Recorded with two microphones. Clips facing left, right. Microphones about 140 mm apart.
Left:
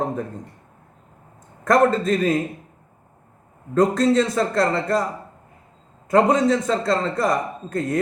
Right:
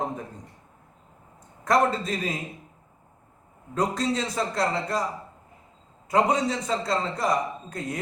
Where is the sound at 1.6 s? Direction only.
50° left (ahead or behind).